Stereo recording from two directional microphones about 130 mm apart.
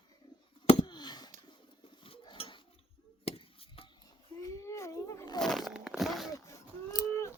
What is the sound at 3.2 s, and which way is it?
Chop, 45° left (ahead or behind).